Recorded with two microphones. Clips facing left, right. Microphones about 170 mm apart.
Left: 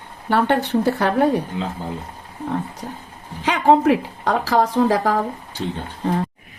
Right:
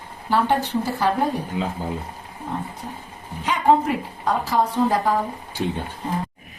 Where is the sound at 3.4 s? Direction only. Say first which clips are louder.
Left 3 dB; 90° left.